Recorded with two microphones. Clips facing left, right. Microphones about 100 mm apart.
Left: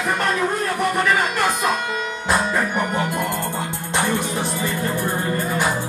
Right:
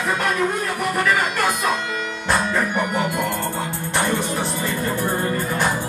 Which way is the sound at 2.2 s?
5° left (ahead or behind).